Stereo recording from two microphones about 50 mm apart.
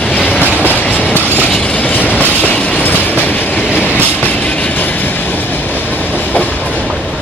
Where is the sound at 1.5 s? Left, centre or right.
Centre.